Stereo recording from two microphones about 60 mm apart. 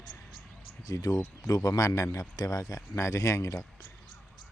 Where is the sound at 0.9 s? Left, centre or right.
Left.